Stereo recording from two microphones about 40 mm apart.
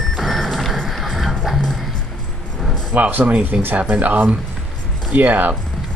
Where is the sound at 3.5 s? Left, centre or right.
Right.